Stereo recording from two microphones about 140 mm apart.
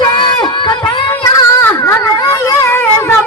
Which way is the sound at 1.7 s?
15° left (ahead or behind).